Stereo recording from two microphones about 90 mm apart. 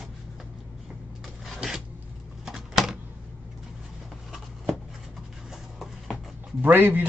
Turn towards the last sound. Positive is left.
turn(degrees=-20)  # may be behind; listen again after turning